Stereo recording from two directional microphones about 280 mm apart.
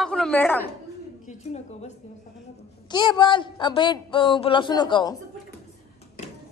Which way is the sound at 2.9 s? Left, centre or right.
Centre.